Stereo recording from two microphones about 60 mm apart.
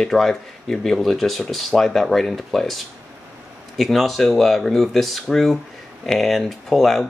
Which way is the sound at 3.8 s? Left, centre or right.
Centre.